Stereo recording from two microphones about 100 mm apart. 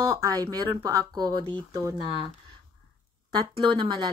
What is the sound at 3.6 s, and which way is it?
Speech, 50° right (ahead or behind).